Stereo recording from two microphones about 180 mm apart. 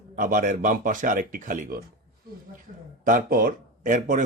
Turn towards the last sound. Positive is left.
turn(degrees=-45)  # may be behind; listen again after turning